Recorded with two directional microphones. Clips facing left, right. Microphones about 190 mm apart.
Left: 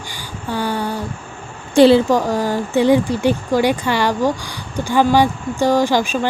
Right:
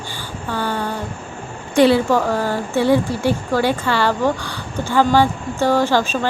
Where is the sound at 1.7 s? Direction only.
30° left (ahead or behind).